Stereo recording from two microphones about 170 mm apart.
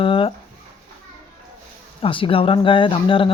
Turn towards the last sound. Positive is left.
turn(degrees=30)  # may be behind; listen again after turning